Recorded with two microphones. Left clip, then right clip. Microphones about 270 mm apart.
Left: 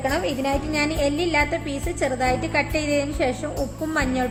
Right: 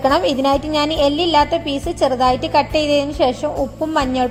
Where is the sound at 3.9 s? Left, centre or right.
Centre.